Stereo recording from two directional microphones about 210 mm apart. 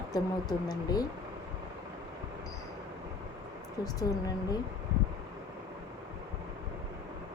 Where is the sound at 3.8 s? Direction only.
15° left (ahead or behind).